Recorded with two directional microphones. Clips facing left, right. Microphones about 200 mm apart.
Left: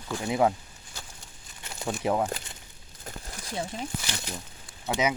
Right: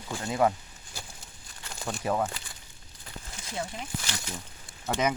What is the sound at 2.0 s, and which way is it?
Speech, 15° left (ahead or behind).